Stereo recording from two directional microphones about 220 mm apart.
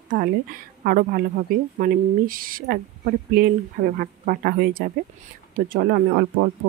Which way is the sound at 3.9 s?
40° right (ahead or behind).